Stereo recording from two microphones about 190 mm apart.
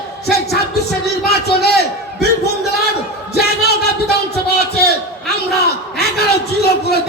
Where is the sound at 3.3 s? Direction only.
55° left (ahead or behind).